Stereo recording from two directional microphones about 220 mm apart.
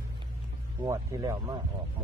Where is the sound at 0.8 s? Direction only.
15° right (ahead or behind).